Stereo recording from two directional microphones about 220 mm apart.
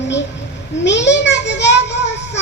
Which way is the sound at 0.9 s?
55° left (ahead or behind).